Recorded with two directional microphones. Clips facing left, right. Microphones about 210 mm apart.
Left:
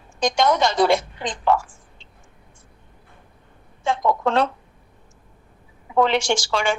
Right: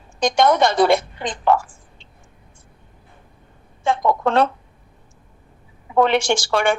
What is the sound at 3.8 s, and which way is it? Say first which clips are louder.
Speech: right 2 dB; 55° right (ahead or behind).